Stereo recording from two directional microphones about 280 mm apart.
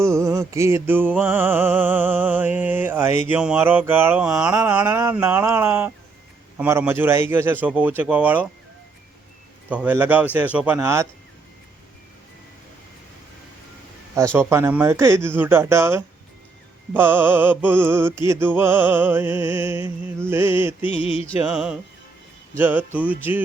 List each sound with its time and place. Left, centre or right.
0.0 s music: centre
9.6 s speech: centre
14.3 s music: centre
20.8 s mantra: centre
21.4 s speech: centre
22.5 s music: centre